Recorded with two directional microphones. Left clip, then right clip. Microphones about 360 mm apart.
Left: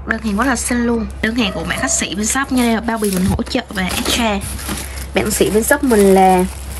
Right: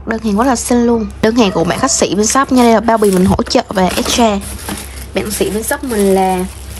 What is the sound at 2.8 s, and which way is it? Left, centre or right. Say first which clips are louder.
Speech: right 8 dB; left.